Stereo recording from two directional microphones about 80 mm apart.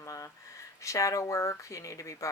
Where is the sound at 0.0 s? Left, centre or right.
Left.